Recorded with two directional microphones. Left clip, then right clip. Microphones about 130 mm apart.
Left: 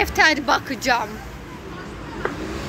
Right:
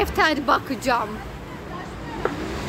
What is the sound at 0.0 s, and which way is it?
A woman's voice, 15° right (ahead or behind).